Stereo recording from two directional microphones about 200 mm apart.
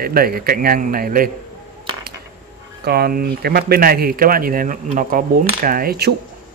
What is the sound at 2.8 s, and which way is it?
Speech, 50° right (ahead or behind).